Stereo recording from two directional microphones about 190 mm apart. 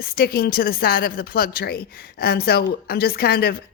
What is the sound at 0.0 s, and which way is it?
Speech, 50° left (ahead or behind).